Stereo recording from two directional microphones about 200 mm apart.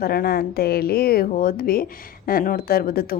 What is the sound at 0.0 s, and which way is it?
A woman's voice, 50° left (ahead or behind).